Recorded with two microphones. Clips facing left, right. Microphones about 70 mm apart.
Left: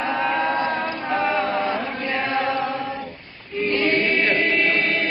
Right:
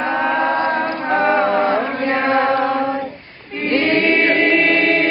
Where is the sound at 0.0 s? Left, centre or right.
Right.